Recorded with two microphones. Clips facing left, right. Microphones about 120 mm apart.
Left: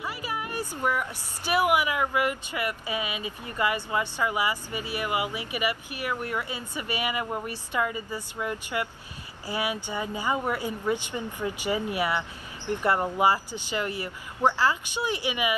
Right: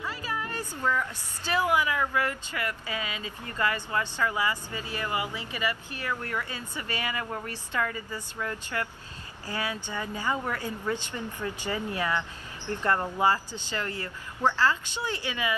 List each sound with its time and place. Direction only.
0.0 s a woman's voice: 15° left (ahead or behind)